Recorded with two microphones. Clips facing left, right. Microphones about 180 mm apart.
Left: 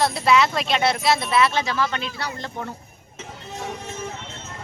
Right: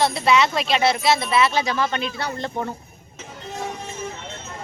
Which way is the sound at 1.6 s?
20° right (ahead or behind).